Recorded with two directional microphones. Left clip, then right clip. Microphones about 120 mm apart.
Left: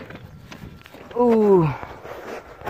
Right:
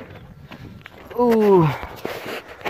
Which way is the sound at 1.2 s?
20° right (ahead or behind).